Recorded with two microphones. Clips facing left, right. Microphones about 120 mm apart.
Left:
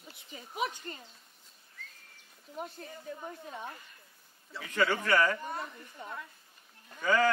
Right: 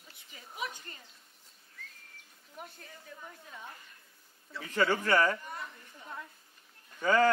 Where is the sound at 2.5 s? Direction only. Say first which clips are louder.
Left 7 dB; 30° left (ahead or behind).